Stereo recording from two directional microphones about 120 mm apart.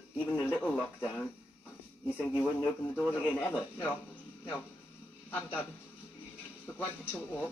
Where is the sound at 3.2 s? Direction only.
15° left (ahead or behind).